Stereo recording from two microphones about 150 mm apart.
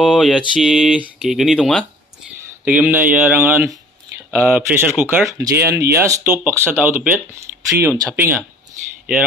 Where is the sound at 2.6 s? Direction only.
10° right (ahead or behind).